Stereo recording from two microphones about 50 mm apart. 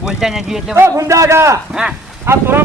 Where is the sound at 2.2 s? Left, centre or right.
Right.